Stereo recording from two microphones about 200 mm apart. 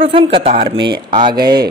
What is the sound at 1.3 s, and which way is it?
Speech, 50° right (ahead or behind).